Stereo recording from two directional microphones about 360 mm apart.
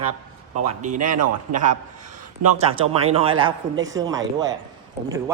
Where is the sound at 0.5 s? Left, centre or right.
Centre.